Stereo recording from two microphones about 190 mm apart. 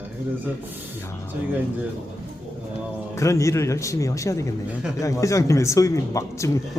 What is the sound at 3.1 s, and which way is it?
Speech, 15° left (ahead or behind).